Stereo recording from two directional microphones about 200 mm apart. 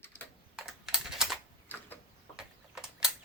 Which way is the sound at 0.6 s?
Centre (ahead or behind).